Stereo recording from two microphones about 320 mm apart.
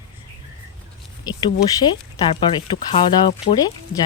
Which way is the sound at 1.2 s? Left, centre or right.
Centre.